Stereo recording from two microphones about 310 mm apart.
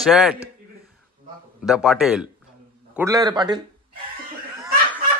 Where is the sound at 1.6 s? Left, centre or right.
Centre.